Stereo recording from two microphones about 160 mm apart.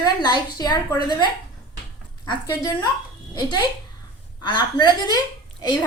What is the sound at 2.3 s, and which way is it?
Speech, 25° left (ahead or behind).